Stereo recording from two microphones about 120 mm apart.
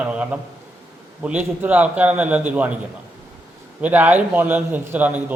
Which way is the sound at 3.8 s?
15° right (ahead or behind).